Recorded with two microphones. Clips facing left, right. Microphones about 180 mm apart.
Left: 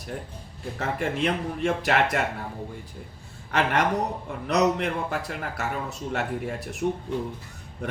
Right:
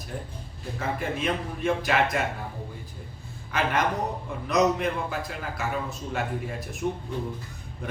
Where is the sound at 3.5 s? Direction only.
70° left (ahead or behind).